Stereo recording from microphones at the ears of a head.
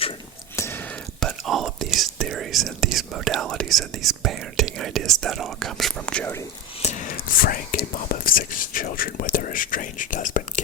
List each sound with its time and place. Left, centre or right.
1.2 s whispering: right
7.0 s whispering: left